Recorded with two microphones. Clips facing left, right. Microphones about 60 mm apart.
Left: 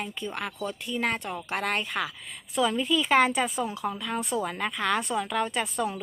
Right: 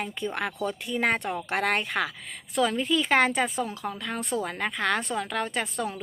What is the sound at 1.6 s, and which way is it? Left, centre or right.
Speech, right.